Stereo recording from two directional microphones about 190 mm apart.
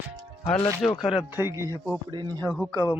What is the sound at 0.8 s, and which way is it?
Speech, 5° left (ahead or behind).